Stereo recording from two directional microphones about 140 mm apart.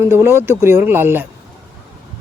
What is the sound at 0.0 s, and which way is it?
Speech, 20° right (ahead or behind).